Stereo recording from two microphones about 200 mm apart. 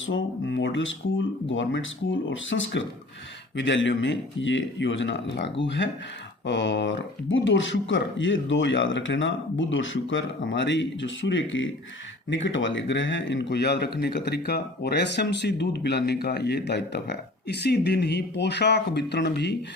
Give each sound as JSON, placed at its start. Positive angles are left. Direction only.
{"t": 0.0, "sound": "speech", "side_deg": 70}